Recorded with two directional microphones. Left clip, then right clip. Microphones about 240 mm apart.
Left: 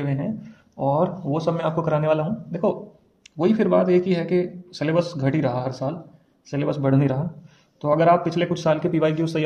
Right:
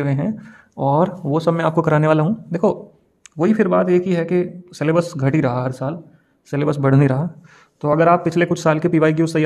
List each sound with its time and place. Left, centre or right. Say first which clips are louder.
0.0 s speech: right 5 dB; right